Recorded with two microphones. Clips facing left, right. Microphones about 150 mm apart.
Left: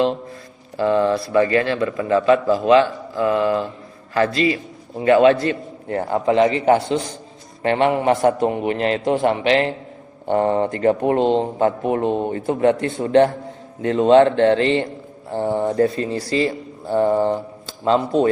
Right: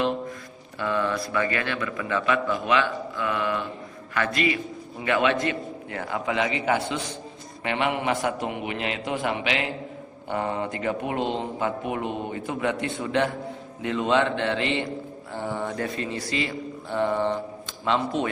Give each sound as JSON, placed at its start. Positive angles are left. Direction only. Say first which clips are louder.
{"t": 0.8, "sound": "a man's voice", "louder": "left 9 dB", "side_deg": 30}
{"t": 15.3, "sound": "a man's voice", "louder": "left 10 dB", "side_deg": 30}